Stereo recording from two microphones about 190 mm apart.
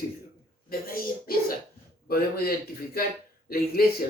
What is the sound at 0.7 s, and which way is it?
Speech, 50° left (ahead or behind).